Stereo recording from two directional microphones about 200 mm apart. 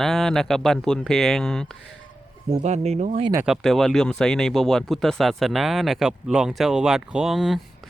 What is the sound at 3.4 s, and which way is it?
Speech, centre (ahead or behind).